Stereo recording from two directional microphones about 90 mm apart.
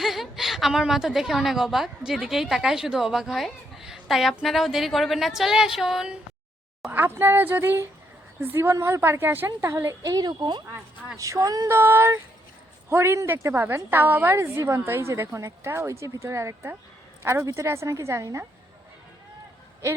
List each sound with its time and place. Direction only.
0.0 s a woman's voice: 5° right (ahead or behind)
6.9 s a woman's voice: 25° right (ahead or behind); by 10.6 s 55° right (ahead or behind)
11.2 s a woman's voice: 35° right (ahead or behind)
11.7 s a woman's voice: 25° right (ahead or behind)